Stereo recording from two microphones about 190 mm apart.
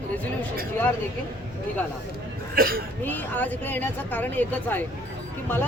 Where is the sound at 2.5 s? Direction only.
50° right (ahead or behind).